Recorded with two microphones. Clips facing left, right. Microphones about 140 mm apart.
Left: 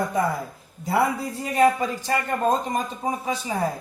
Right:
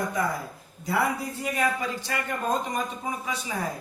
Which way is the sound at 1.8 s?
45° left (ahead or behind).